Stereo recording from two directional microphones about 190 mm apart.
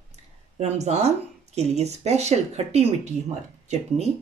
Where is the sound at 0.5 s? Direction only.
35° right (ahead or behind).